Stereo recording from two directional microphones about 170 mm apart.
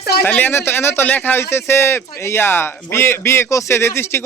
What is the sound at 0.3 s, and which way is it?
Speech, 10° left (ahead or behind).